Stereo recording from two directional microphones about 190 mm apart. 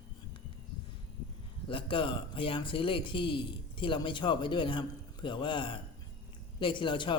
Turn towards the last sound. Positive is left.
turn(degrees=25)  # may be behind; listen again after turning